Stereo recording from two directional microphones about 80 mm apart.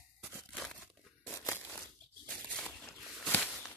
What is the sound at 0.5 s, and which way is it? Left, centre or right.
Crumpling, centre.